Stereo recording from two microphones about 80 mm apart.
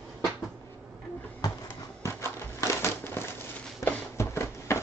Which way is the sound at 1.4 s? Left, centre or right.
Left.